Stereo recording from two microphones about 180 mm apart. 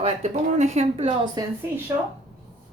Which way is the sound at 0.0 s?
40° right (ahead or behind).